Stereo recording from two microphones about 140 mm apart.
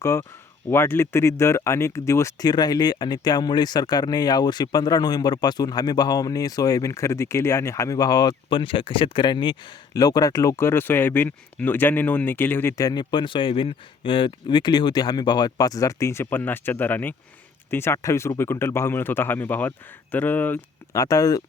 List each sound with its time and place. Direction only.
0.0 s speech: 20° left (ahead or behind)
20.9 s speech: 25° left (ahead or behind)